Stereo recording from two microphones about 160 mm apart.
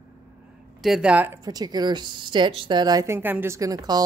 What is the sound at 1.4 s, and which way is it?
A woman's voice, 25° right (ahead or behind).